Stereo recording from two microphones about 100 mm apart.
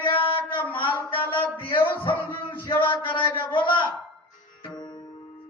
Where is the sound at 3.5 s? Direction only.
55° left (ahead or behind).